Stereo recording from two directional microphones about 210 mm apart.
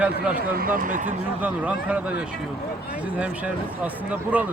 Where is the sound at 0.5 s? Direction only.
45° right (ahead or behind).